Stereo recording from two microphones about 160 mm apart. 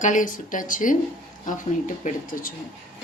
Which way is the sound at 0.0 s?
55° left (ahead or behind).